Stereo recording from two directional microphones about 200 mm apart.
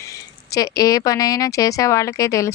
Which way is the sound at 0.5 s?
15° left (ahead or behind).